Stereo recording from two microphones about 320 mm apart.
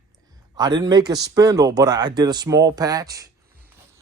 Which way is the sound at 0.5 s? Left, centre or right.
Centre.